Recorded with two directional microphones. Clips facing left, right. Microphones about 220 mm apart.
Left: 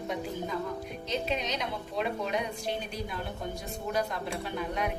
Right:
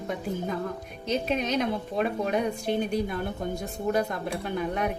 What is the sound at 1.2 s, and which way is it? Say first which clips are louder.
A woman's voice: right 6 dB; 50° right (ahead or behind).